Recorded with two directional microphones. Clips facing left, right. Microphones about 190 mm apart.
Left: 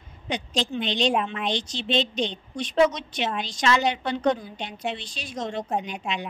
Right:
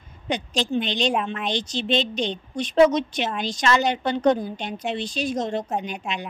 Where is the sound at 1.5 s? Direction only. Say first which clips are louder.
Right 4 dB; 45° right (ahead or behind).